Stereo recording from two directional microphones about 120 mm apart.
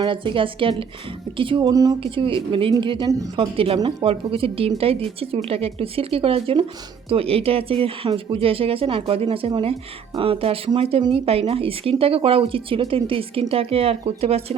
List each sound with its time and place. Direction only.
0.0 s a woman's voice: 45° right (ahead or behind)
1.7 s speech: 30° right (ahead or behind)
2.0 s a woman's voice: 45° right (ahead or behind)